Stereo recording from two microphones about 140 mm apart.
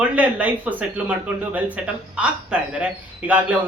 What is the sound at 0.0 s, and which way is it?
Speech, 10° right (ahead or behind).